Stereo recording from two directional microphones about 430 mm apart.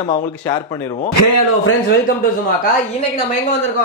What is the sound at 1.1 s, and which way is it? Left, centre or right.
Speech, left.